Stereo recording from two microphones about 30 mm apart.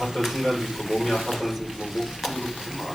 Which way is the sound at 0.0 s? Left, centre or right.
Centre.